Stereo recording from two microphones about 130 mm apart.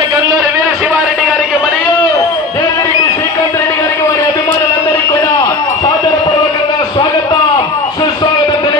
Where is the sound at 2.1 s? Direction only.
25° left (ahead or behind).